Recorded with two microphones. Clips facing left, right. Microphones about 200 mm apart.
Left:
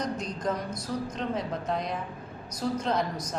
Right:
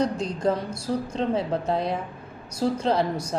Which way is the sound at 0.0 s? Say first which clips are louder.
Right 7 dB; 30° right (ahead or behind).